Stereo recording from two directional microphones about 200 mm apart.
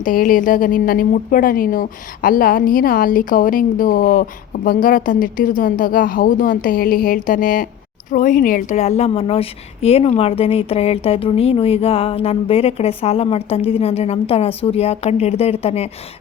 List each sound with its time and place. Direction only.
0.0 s a woman's voice: 45° left (ahead or behind)